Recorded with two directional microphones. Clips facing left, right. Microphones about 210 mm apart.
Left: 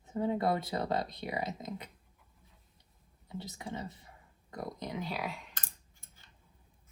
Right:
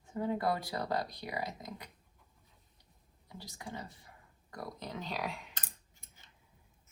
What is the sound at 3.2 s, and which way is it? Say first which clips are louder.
Speech: left 5 dB; 25° left (ahead or behind).